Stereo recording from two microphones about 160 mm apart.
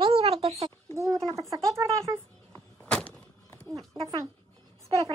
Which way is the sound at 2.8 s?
10° left (ahead or behind).